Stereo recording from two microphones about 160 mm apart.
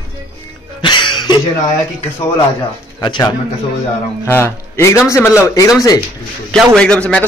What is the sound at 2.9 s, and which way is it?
Speech, 25° left (ahead or behind).